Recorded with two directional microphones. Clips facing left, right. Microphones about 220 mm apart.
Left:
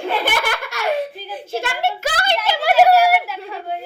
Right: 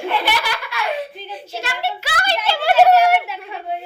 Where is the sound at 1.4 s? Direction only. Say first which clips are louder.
Left 4 dB; 50° left (ahead or behind).